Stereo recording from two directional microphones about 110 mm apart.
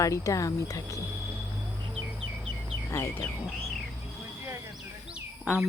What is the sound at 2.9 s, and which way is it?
Speech, 25° left (ahead or behind).